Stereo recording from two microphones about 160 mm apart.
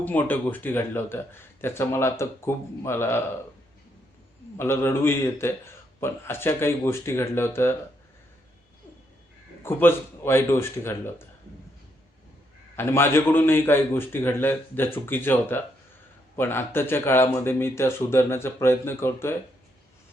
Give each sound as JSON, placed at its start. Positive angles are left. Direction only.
{"t": 0.0, "sound": "speech", "side_deg": 10}
{"t": 4.5, "sound": "speech", "side_deg": 15}
{"t": 9.6, "sound": "speech", "side_deg": 15}
{"t": 12.7, "sound": "speech", "side_deg": 15}